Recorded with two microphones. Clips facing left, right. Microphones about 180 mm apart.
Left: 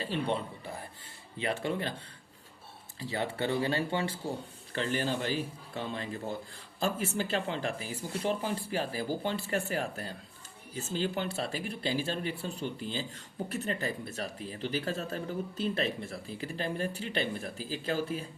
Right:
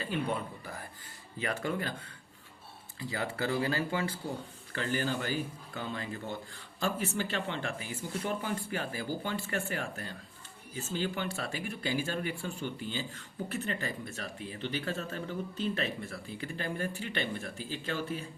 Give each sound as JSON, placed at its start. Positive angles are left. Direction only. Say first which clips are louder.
{"t": 0.0, "sound": "speech", "louder": "left 1 dB", "side_deg": 30}
{"t": 3.0, "sound": "speech", "louder": "left 2 dB", "side_deg": 30}